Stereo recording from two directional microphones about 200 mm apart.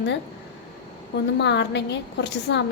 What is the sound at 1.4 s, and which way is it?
A woman's voice, 60° left (ahead or behind).